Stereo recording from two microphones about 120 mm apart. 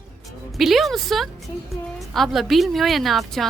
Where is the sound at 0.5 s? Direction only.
Centre (ahead or behind).